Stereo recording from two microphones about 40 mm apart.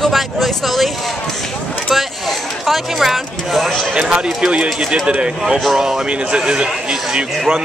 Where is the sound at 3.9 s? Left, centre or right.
Right.